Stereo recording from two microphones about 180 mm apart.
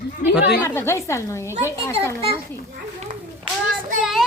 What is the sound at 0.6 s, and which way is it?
A woman's voice, 15° left (ahead or behind).